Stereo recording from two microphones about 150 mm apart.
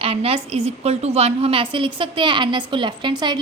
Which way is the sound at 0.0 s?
40° right (ahead or behind).